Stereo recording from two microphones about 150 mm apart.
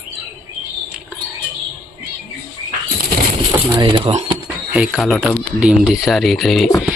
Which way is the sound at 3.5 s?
25° right (ahead or behind).